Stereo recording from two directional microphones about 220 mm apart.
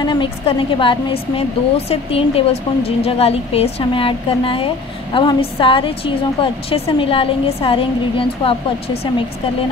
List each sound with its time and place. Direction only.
0.0 s a woman's voice: 20° left (ahead or behind)